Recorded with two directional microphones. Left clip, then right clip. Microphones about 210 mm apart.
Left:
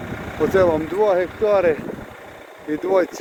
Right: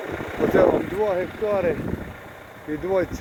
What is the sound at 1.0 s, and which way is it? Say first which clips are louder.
Speech: left 6 dB; 25° left (ahead or behind).